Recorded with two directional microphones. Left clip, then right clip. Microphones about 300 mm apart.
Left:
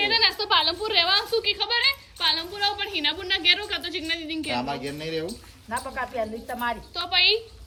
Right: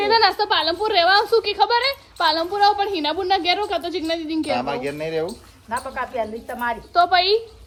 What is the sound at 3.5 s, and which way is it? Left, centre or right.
Speech, centre.